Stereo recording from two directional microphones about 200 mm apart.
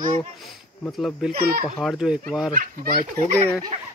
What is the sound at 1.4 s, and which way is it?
Speech, 50° right (ahead or behind).